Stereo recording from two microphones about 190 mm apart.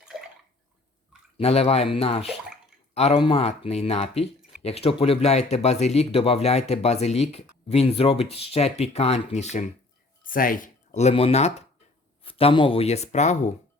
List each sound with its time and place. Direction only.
1.4 s speech: 30° left (ahead or behind)